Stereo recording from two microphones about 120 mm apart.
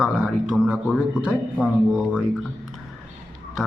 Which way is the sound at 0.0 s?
5° right (ahead or behind).